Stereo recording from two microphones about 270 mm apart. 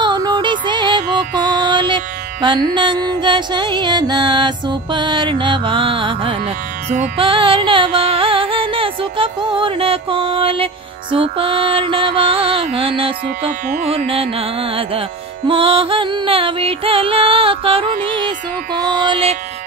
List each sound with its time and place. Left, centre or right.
0.0 s music: centre